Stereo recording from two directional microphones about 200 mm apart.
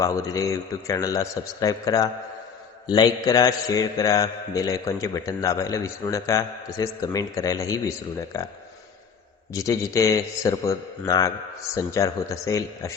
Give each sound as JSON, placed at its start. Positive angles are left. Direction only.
{"t": 0.0, "sound": "a man's voice", "side_deg": 15}
{"t": 9.5, "sound": "a man's voice", "side_deg": 15}